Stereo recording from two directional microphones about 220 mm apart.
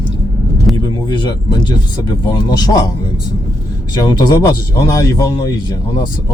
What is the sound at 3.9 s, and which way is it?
Speech, 20° left (ahead or behind).